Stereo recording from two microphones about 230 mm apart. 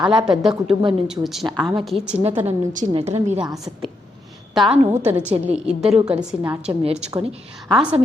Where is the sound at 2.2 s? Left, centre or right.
Right.